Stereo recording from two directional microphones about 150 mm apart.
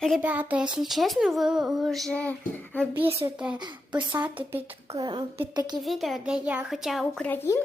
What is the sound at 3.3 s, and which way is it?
Speech, 5° right (ahead or behind).